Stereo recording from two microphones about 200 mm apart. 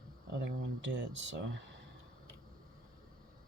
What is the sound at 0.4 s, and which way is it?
Speech, 60° right (ahead or behind).